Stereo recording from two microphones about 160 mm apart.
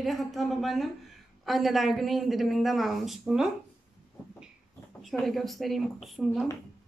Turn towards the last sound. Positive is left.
turn(degrees=0)  # may be behind; listen again after turning